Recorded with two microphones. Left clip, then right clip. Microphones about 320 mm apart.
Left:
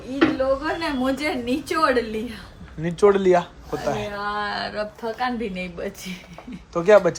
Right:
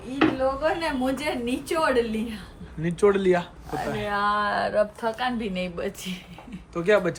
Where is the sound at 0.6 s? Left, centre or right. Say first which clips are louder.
Even; centre.